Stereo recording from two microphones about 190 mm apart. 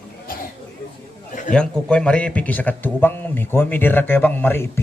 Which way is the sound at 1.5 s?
5° left (ahead or behind).